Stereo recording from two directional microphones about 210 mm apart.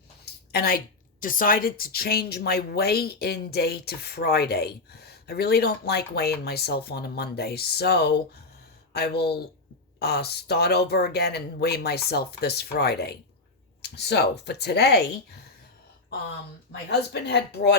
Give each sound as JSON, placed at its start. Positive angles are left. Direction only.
{"t": 0.5, "sound": "a woman's voice", "side_deg": 45}
{"t": 16.9, "sound": "a woman's voice", "side_deg": 50}